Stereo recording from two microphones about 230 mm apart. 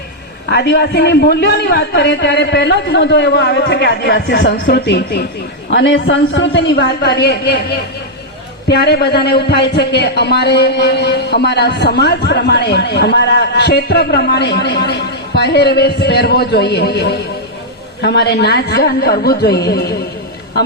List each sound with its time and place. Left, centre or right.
0.5 s a man's voice: left